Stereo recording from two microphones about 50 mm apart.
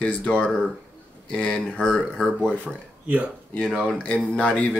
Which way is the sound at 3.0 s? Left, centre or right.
Right.